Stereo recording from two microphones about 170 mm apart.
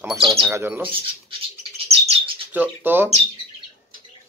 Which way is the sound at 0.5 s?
15° right (ahead or behind).